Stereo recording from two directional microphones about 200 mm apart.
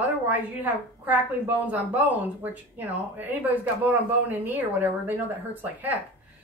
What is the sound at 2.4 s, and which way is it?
A man's voice, 10° right (ahead or behind).